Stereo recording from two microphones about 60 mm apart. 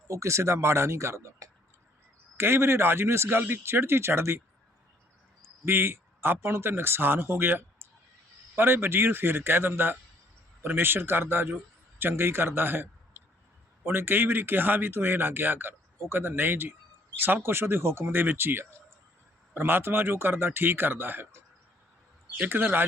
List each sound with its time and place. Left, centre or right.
0.1 s speech: right
5.6 s a man's voice: right
22.4 s speech: right